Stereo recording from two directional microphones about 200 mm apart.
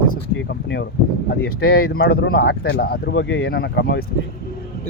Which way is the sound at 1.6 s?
50° left (ahead or behind).